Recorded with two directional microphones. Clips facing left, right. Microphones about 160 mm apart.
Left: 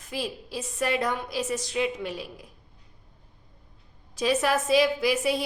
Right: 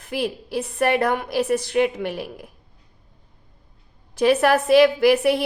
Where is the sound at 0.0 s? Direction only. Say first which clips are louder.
Right 7 dB; 60° right (ahead or behind).